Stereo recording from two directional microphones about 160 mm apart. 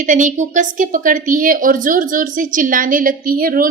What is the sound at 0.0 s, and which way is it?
A woman's voice, 55° right (ahead or behind).